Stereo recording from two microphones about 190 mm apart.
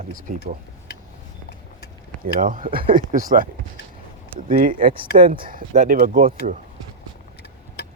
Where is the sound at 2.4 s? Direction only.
45° right (ahead or behind).